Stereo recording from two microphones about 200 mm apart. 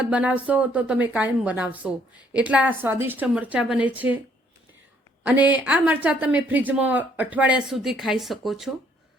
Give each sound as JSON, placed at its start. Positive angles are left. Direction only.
{"t": 0.0, "sound": "speech", "side_deg": -5}
{"t": 5.2, "sound": "speech", "side_deg": -10}